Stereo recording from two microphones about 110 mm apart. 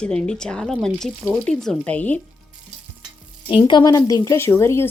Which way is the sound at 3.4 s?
45° left (ahead or behind).